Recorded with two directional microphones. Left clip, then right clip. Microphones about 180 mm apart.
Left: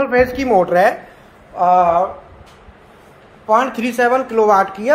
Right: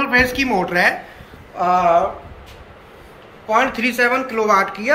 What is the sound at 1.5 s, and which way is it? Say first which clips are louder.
Speech: left 2 dB; 55° left (ahead or behind).